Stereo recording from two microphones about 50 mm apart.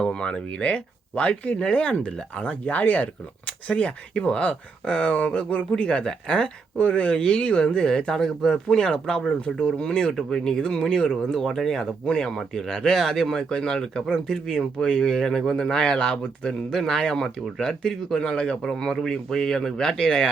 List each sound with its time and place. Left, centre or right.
0.0 s speech: centre
8.1 s speech: centre
9.4 s speech: left
16.5 s speech: centre